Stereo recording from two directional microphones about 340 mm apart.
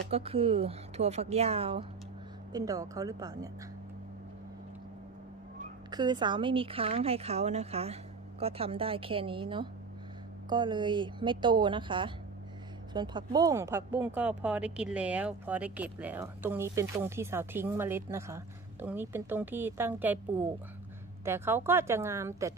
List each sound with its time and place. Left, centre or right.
0.1 s speech: centre
5.9 s speech: centre
21.2 s speech: centre